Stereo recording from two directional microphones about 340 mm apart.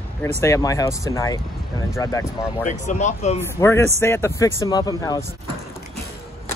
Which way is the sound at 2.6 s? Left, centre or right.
Left.